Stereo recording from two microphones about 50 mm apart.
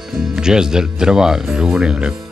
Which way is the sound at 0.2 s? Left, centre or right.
Centre.